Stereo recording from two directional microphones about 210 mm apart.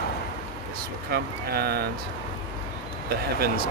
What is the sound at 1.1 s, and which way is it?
Speech, 50° right (ahead or behind).